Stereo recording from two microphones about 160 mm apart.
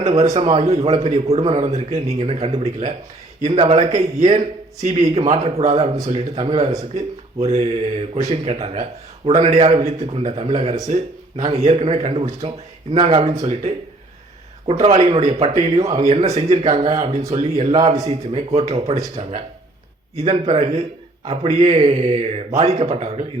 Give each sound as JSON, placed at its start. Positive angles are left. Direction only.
{"t": 0.0, "sound": "a man's voice", "side_deg": -40}
{"t": 14.7, "sound": "a man's voice", "side_deg": -40}